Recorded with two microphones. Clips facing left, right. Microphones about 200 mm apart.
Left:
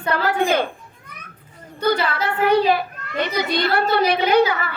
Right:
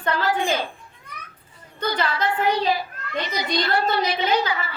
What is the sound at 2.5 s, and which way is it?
A child's voice, 60° left (ahead or behind).